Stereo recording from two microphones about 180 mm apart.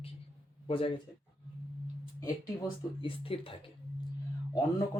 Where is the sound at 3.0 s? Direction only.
30° left (ahead or behind).